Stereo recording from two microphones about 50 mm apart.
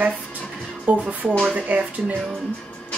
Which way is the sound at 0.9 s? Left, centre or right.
Right.